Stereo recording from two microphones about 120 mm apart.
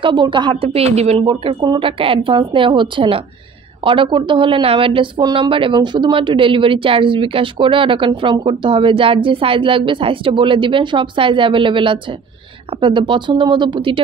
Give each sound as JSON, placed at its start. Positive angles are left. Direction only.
{"t": 0.0, "sound": "speech", "side_deg": -40}
{"t": 1.2, "sound": "speech", "side_deg": -40}